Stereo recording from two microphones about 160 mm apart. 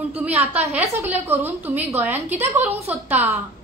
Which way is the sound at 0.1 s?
10° right (ahead or behind).